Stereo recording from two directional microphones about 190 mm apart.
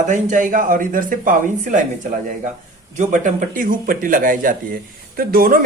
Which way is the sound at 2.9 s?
40° right (ahead or behind).